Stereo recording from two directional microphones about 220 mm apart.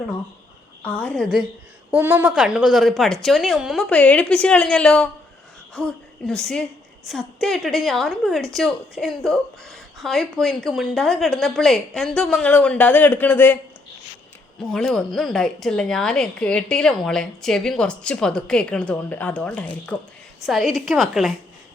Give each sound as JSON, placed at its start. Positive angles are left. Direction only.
{"t": 0.8, "sound": "speech", "side_deg": 5}
{"t": 14.6, "sound": "speech", "side_deg": 0}